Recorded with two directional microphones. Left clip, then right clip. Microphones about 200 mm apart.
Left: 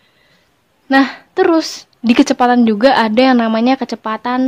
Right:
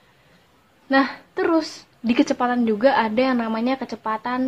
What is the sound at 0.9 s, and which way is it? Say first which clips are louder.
A woman's voice: left 7 dB; 55° left (ahead or behind).